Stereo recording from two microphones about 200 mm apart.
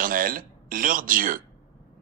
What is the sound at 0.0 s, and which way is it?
Speech, 45° right (ahead or behind).